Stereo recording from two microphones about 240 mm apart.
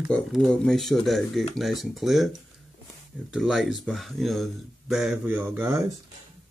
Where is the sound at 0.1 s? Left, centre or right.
Centre.